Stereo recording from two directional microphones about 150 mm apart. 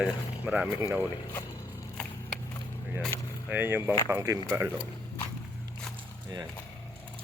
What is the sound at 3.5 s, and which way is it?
Speech, 15° right (ahead or behind).